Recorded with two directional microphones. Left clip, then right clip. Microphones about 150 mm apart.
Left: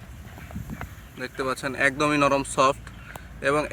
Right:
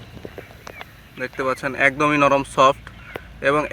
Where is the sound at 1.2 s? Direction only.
30° right (ahead or behind).